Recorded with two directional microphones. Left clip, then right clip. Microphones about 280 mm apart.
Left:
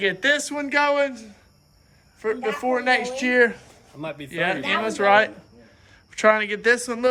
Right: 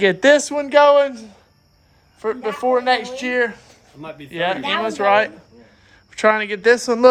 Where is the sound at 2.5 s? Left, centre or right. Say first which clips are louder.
Right 5 dB; centre.